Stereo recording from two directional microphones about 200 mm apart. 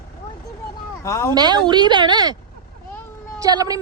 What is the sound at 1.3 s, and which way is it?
A woman's voice, 20° right (ahead or behind).